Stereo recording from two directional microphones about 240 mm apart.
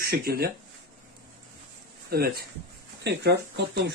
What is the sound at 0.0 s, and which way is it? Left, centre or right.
Speech, right.